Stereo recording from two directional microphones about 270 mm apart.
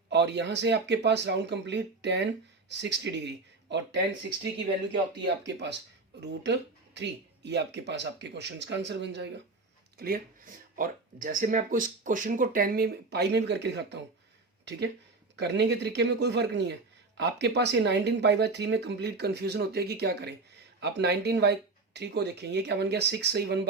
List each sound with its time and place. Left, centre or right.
0.1 s speech: right
14.6 s a sound: right
15.4 s speech: right